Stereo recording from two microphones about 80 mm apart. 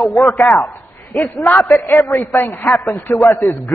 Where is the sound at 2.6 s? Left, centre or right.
Centre.